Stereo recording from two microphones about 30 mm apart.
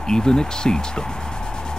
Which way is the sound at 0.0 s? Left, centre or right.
Left.